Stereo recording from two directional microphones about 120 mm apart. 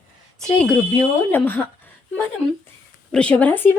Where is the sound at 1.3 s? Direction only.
15° left (ahead or behind).